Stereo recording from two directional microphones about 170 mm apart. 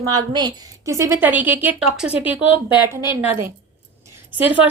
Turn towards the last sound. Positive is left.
turn(degrees=-10)  # may be behind; listen again after turning